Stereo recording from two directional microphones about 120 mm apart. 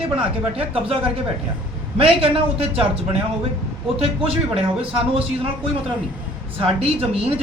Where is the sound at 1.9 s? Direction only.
50° right (ahead or behind).